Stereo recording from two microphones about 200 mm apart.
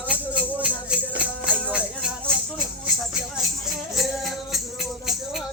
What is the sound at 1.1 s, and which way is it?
Music, 45° right (ahead or behind).